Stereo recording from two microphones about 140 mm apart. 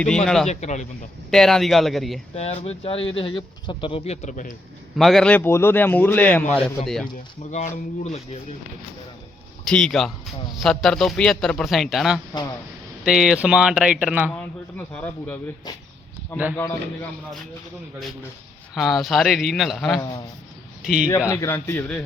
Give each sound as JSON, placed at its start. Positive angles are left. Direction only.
{"t": 0.4, "sound": "speech", "side_deg": 55}
{"t": 1.3, "sound": "speech", "side_deg": 5}
{"t": 2.3, "sound": "speech", "side_deg": 50}
{"t": 4.9, "sound": "a man's voice", "side_deg": 0}
{"t": 7.5, "sound": "speech", "side_deg": 55}
{"t": 9.6, "sound": "speech", "side_deg": 5}
{"t": 14.3, "sound": "a man's voice", "side_deg": 15}
{"t": 18.7, "sound": "speech", "side_deg": 0}
{"t": 21.2, "sound": "a man's voice", "side_deg": 20}